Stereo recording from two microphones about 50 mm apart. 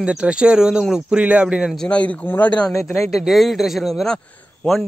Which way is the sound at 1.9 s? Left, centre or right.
Left.